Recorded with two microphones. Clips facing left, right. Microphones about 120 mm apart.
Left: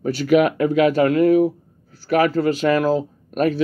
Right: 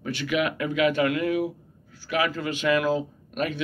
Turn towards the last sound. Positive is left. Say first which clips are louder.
# left 9 dB
turn(degrees=40)  # may be behind; listen again after turning